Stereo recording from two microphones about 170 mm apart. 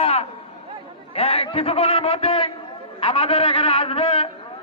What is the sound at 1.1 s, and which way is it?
A man's voice, 35° left (ahead or behind).